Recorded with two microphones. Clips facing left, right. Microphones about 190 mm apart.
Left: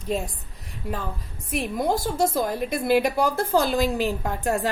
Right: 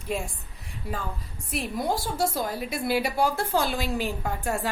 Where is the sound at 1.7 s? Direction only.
45° left (ahead or behind).